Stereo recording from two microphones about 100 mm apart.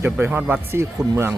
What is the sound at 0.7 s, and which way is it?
Speech, 25° right (ahead or behind).